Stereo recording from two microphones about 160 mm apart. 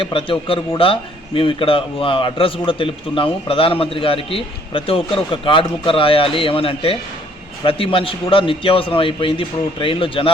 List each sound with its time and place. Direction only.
0.0 s a man's voice: 35° left (ahead or behind)